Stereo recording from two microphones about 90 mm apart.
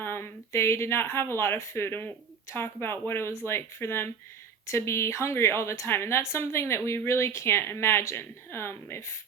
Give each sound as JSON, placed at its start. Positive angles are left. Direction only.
{"t": 0.0, "sound": "a woman's voice", "side_deg": 25}